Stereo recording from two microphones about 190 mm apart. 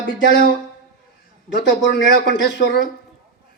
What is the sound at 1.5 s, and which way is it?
Speech, 25° right (ahead or behind).